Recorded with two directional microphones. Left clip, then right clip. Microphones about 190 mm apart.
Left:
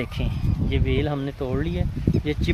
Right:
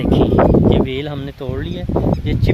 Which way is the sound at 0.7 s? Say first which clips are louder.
Right 7 dB; 40° right (ahead or behind).